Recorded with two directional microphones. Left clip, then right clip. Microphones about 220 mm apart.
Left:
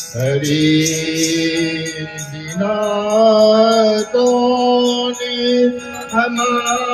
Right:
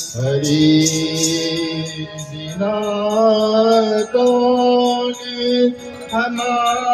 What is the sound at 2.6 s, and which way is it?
Music, 35° left (ahead or behind).